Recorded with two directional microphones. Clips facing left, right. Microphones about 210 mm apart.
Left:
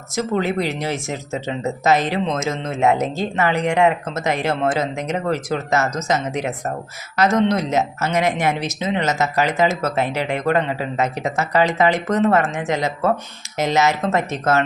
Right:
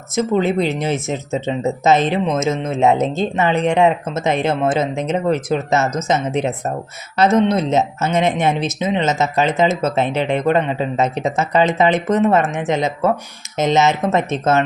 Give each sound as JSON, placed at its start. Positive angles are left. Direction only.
{"t": 0.2, "sound": "speech", "side_deg": -20}